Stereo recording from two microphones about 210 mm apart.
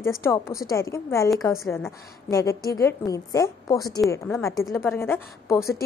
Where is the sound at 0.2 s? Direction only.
15° left (ahead or behind).